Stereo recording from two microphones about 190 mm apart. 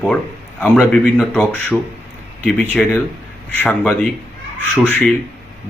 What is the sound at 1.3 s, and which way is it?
Speech, 10° left (ahead or behind).